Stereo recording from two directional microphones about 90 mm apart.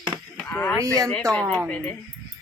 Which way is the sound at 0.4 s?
25° left (ahead or behind).